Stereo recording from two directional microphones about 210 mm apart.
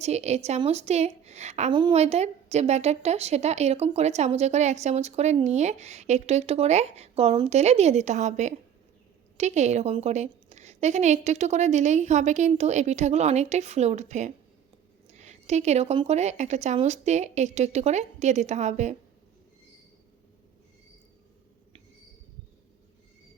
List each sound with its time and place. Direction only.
0.0 s a woman's voice: 30° right (ahead or behind)